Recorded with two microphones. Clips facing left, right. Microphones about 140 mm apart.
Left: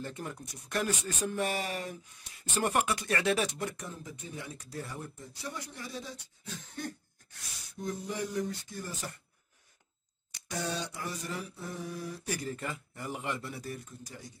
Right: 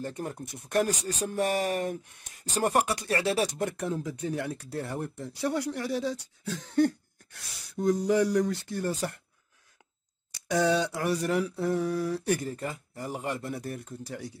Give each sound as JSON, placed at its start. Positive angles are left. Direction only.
{"t": 0.0, "sound": "speech", "side_deg": -45}
{"t": 3.5, "sound": "speech", "side_deg": -55}
{"t": 7.7, "sound": "speech", "side_deg": -90}
{"t": 10.5, "sound": "speech", "side_deg": -90}
{"t": 12.4, "sound": "speech", "side_deg": -40}